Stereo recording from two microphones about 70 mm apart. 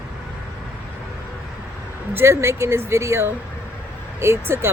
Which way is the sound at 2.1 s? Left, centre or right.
Right.